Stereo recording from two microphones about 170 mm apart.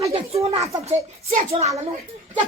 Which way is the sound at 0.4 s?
35° right (ahead or behind).